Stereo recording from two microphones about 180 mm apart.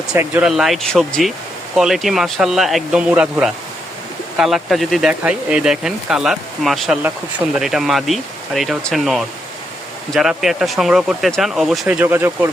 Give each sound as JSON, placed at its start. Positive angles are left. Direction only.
{"t": 0.1, "sound": "speech", "side_deg": -5}